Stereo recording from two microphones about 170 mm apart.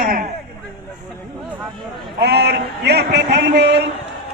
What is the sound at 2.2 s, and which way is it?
A man's voice, 75° right (ahead or behind).